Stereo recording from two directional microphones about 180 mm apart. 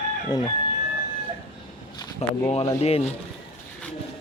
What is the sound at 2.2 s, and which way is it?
Speech, 35° left (ahead or behind).